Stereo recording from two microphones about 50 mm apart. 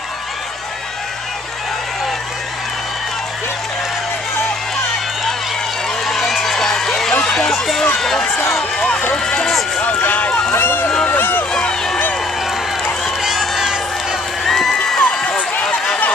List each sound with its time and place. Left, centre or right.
6.0 s run: centre
9.1 s vehicle: centre
9.8 s speech: left
10.0 s speech: left
10.5 s speech: left
11.5 s a sound: centre
13.2 s crowd: centre
14.4 s crowd: centre
15.0 s run: left
15.6 s run: centre